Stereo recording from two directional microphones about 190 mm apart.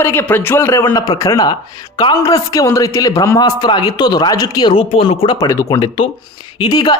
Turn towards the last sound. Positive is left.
turn(degrees=20)  # may be behind; listen again after turning